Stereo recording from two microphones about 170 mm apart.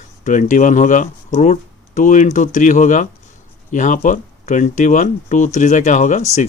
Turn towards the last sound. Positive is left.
turn(degrees=45)  # may be behind; listen again after turning